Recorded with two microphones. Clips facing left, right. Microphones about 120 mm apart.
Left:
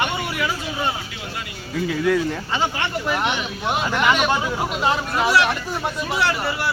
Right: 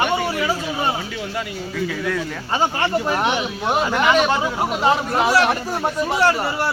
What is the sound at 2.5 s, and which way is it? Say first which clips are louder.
Speech: right 8 dB; 40° right (ahead or behind).